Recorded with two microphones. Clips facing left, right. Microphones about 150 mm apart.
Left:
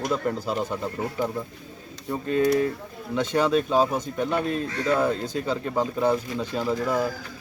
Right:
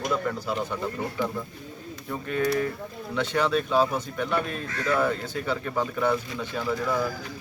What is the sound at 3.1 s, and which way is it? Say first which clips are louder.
Speech: left 3 dB; 15° left (ahead or behind).